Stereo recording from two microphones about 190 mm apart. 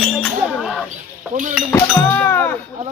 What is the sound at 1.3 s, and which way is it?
Cutlery, 40° right (ahead or behind).